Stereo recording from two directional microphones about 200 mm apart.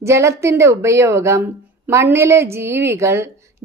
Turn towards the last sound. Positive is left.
turn(degrees=-15)  # may be behind; listen again after turning